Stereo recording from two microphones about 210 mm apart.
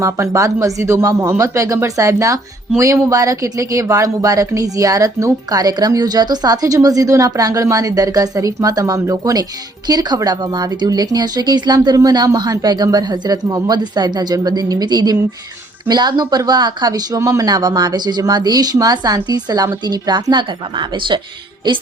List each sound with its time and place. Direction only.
0.0 s speech: 15° right (ahead or behind)